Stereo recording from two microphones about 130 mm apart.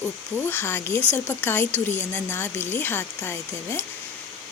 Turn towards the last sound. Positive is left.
turn(degrees=20)  # may be behind; listen again after turning